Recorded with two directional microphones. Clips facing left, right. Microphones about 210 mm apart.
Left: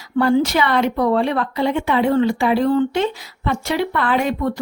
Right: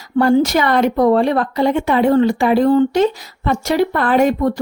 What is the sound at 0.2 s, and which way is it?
Speech, 45° right (ahead or behind).